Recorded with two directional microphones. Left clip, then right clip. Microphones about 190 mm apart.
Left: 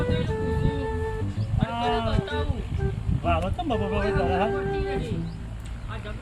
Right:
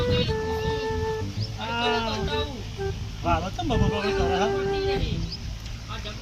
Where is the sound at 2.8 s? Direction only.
5° right (ahead or behind).